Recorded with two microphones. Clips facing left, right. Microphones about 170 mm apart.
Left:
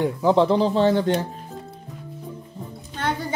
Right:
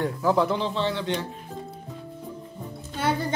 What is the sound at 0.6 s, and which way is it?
Speech, 40° left (ahead or behind).